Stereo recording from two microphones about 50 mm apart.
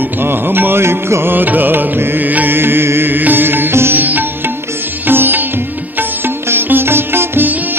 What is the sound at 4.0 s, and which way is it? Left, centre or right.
Music, right.